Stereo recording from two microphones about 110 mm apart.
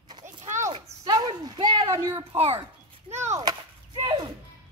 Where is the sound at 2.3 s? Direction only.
65° right (ahead or behind).